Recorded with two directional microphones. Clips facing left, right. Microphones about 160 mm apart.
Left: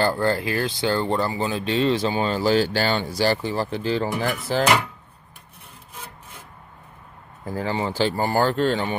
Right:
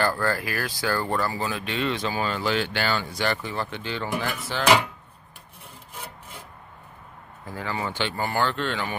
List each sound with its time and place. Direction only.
0.0 s speech: 25° left (ahead or behind)
7.4 s speech: 35° left (ahead or behind)